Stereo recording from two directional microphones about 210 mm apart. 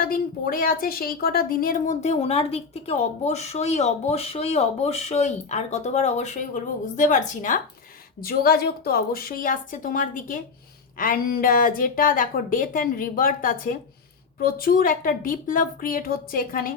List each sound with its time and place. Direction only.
0.0 s a woman's voice: 45° left (ahead or behind)